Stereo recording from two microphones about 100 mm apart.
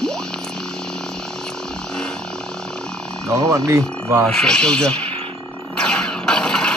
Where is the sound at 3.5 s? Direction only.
30° right (ahead or behind).